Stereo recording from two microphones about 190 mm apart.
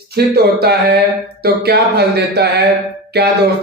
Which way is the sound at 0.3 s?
55° right (ahead or behind).